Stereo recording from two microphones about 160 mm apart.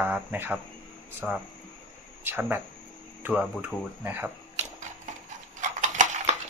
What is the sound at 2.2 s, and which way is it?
Speech, 10° right (ahead or behind).